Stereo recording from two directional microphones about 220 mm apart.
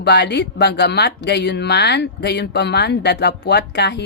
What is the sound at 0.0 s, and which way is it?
Speech, 50° left (ahead or behind).